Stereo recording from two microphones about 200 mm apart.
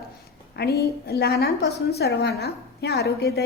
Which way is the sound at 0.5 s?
55° left (ahead or behind).